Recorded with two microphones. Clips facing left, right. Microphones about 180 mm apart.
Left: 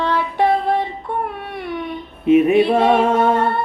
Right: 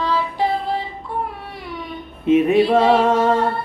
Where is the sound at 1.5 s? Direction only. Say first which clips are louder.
Left 6 dB; 60° left (ahead or behind).